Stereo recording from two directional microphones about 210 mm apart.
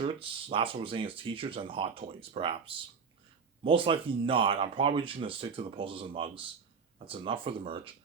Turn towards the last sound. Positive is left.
turn(degrees=-25)  # may be behind; listen again after turning